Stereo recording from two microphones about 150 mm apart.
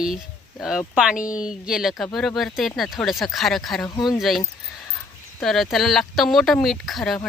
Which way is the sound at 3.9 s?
30° left (ahead or behind).